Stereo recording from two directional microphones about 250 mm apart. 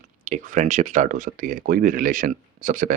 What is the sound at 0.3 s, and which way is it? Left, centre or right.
Speech, right.